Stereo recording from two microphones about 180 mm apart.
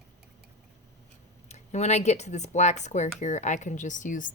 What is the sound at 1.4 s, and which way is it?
A woman's voice, 40° left (ahead or behind).